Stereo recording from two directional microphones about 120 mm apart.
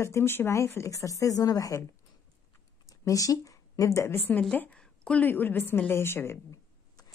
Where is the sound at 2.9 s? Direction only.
30° left (ahead or behind).